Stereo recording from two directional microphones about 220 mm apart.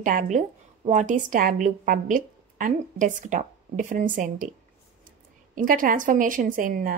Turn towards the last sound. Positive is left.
turn(degrees=-40)  # may be behind; listen again after turning